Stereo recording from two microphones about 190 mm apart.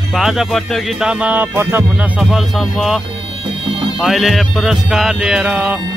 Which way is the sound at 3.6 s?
25° right (ahead or behind).